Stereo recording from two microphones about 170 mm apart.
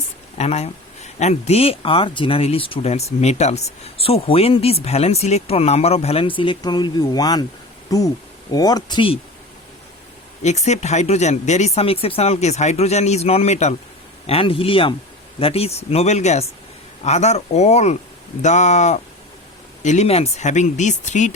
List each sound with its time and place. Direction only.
0.3 s speech: 40° left (ahead or behind)
10.4 s speech: 40° left (ahead or behind)